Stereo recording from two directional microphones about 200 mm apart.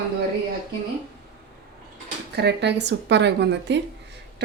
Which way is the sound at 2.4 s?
60° right (ahead or behind).